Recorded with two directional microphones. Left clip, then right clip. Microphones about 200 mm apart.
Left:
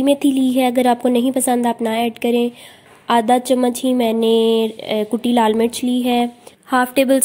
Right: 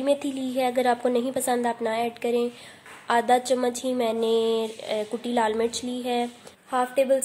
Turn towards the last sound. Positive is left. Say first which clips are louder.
# left 7 dB
turn(degrees=55)  # may be behind; listen again after turning